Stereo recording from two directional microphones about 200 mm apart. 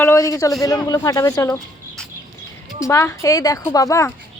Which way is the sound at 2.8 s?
15° left (ahead or behind).